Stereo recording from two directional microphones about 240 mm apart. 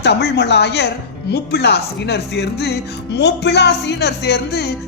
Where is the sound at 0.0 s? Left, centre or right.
Left.